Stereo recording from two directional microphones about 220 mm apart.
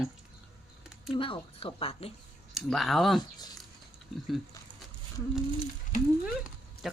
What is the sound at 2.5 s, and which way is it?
Speech, centre (ahead or behind).